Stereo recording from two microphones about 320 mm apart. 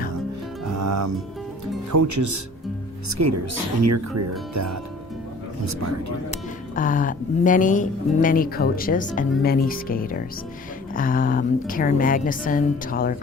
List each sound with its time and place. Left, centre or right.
0.6 s music: right
1.9 s speech: right
6.3 s speech: left